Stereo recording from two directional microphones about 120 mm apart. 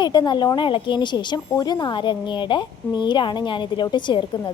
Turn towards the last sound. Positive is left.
turn(degrees=40)  # may be behind; listen again after turning